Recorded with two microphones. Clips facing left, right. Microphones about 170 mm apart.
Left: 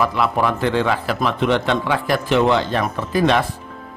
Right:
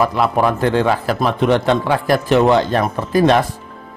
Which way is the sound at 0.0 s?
40° right (ahead or behind).